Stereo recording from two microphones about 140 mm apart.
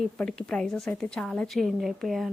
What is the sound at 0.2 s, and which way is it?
A woman's voice, 5° left (ahead or behind).